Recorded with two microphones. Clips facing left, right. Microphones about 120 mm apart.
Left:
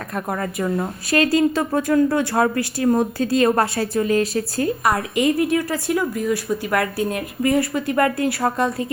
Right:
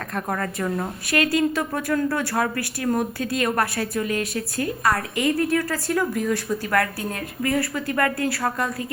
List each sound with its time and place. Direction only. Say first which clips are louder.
0.3 s a woman's voice: left 3 dB; 10° left (ahead or behind)
1.1 s a woman's voice: left 4 dB; 30° left (ahead or behind)
4.8 s a woman's voice: left 1 dB; 20° left (ahead or behind)